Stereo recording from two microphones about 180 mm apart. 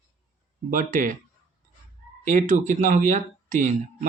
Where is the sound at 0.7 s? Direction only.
45° right (ahead or behind).